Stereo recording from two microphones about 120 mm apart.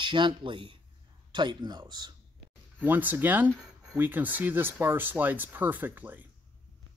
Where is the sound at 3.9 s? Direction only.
15° right (ahead or behind).